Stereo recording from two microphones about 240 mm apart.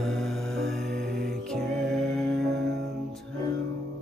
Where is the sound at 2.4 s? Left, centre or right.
Right.